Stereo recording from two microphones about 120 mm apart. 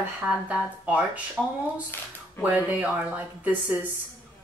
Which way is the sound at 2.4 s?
10° right (ahead or behind).